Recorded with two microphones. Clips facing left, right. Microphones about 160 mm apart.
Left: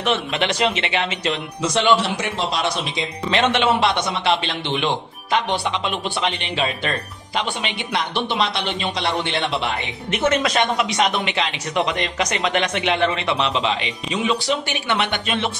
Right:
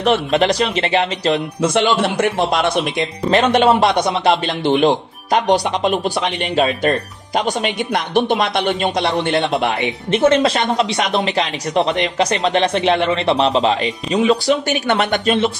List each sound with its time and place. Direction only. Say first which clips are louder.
0.0 s speech: right 7 dB; 40° right (ahead or behind)
1.6 s speech: even; 55° right (ahead or behind)
10.1 s speech: right 5 dB; 30° right (ahead or behind)